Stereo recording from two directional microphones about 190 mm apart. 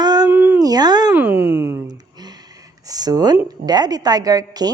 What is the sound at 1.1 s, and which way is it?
Speech, 10° right (ahead or behind).